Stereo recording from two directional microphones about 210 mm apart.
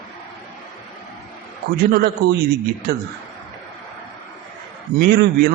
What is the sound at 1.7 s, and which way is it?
Speech, 45° right (ahead or behind).